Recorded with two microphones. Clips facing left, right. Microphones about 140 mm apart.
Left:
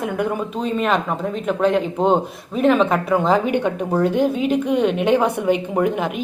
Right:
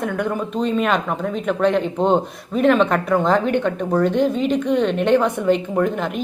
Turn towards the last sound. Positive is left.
turn(degrees=10)  # may be behind; listen again after turning